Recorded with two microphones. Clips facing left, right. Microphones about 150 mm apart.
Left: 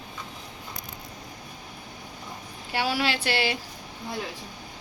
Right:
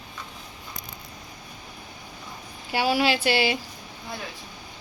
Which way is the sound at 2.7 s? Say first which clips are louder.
Right 4 dB; 5° right (ahead or behind).